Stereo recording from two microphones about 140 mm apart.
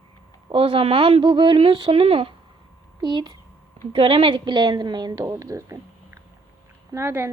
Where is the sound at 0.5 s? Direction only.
40° right (ahead or behind).